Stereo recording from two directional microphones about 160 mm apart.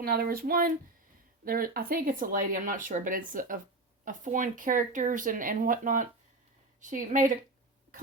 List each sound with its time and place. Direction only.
0.0 s speech: 70° right (ahead or behind); by 7.3 s 55° right (ahead or behind)